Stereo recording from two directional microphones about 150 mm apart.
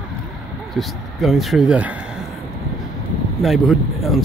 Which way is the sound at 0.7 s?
Centre (ahead or behind).